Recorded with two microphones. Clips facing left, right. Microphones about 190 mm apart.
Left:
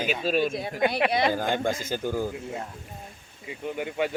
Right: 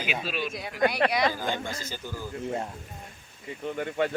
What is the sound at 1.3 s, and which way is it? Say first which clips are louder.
Speech: left 6 dB; 50° left (ahead or behind).